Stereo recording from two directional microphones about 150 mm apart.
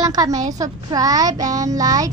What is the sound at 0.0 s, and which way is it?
Speech, 25° right (ahead or behind).